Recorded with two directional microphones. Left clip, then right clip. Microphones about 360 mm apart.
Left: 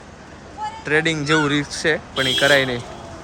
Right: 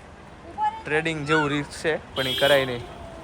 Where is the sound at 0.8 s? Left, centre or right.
Centre.